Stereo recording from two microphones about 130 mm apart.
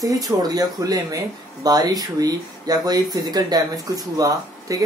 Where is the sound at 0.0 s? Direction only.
30° right (ahead or behind).